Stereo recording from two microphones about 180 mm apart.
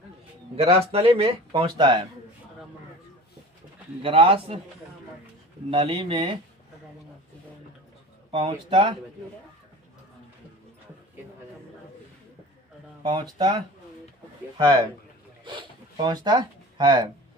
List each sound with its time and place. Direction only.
0.5 s speech: 35° right (ahead or behind)
4.0 s speech: 30° right (ahead or behind)
5.7 s speech: 30° right (ahead or behind)
8.3 s speech: 30° right (ahead or behind)
13.0 s speech: 25° right (ahead or behind)
15.4 s zipper: 25° right (ahead or behind)